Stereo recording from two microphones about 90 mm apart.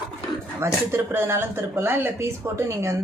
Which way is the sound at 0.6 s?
30° right (ahead or behind).